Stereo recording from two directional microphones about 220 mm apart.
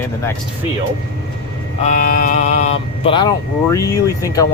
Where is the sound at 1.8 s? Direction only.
35° left (ahead or behind).